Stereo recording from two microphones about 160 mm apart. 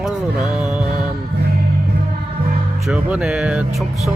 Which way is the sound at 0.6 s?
5° right (ahead or behind).